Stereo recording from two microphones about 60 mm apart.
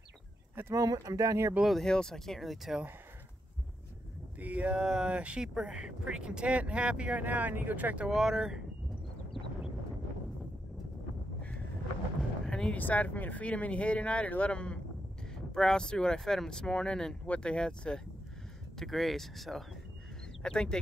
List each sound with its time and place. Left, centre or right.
0.7 s speech: right
1.6 s speech: centre
1.9 s speech: centre
4.4 s speech: right
8.1 s speech: centre
12.4 s music: centre
12.7 s speech: left
18.8 s speech: centre
20.4 s speech: centre